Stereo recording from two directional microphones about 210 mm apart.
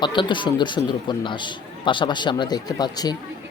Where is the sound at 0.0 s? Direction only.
20° left (ahead or behind).